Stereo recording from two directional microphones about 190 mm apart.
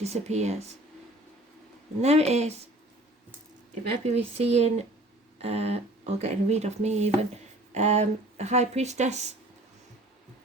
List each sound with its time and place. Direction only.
0.0 s speech: 35° right (ahead or behind)
2.0 s speech: 35° right (ahead or behind)
4.0 s speech: 35° right (ahead or behind)